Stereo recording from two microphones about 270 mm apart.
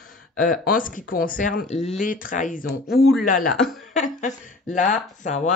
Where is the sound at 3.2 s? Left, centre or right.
Left.